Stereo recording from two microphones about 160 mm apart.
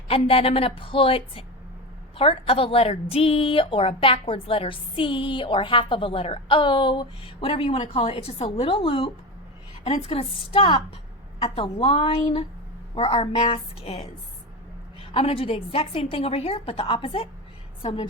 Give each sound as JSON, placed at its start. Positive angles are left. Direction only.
{"t": 0.1, "sound": "a woman's voice", "side_deg": 35}
{"t": 15.1, "sound": "a woman's voice", "side_deg": 35}